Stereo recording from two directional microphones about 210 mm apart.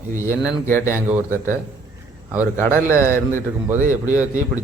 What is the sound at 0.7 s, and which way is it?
Speech, 10° left (ahead or behind).